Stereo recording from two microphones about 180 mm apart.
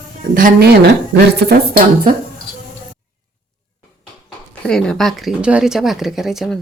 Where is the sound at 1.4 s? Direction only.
55° right (ahead or behind).